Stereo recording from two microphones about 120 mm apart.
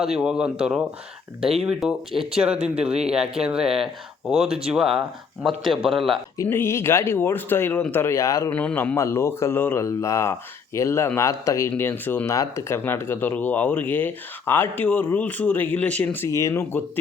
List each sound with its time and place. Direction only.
0.0 s speech: 5° right (ahead or behind)
6.4 s speech: 20° left (ahead or behind)
8.5 s speech: 15° left (ahead or behind)
16.3 s speech: 25° left (ahead or behind)